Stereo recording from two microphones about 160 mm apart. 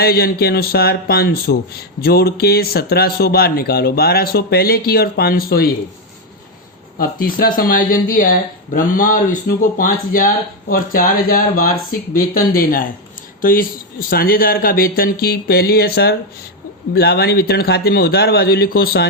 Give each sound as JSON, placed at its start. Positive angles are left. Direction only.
{"t": 0.0, "sound": "speech", "side_deg": 70}
{"t": 7.0, "sound": "speech", "side_deg": 65}